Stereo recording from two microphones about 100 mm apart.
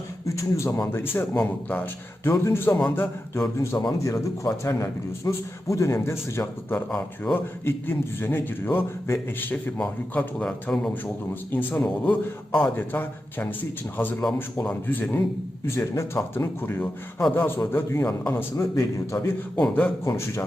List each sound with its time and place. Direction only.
0.3 s a man's voice: 30° left (ahead or behind)
9.7 s a man's voice: 10° left (ahead or behind); by 19.3 s 30° left (ahead or behind)
19.5 s a man's voice: 15° left (ahead or behind)
20.1 s a man's voice: 30° left (ahead or behind)